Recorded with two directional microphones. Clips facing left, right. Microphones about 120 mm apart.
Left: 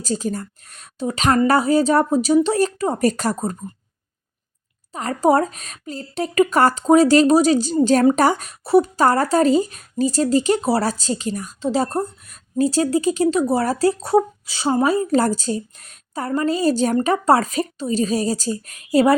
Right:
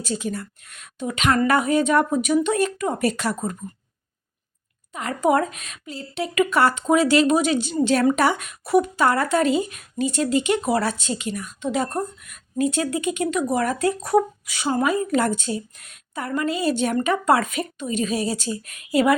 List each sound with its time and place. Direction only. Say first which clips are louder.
0.0 s speech: left 3 dB; 40° left (ahead or behind)
4.9 s speech: left 3 dB; 35° left (ahead or behind)